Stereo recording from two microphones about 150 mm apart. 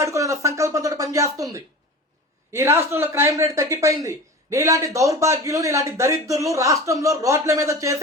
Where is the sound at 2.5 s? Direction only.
15° right (ahead or behind).